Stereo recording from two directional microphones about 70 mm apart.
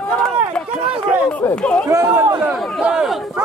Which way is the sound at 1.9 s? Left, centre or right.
Right.